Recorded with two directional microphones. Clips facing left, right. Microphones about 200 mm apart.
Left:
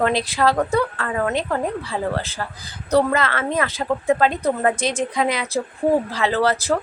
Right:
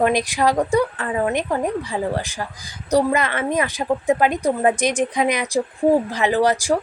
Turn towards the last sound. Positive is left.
turn(degrees=-15)  # may be behind; listen again after turning